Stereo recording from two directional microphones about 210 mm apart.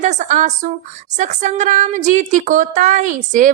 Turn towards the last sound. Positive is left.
turn(degrees=-35)  # may be behind; listen again after turning